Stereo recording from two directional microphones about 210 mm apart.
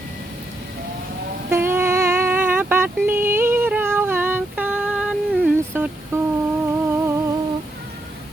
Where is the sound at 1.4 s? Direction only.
10° right (ahead or behind).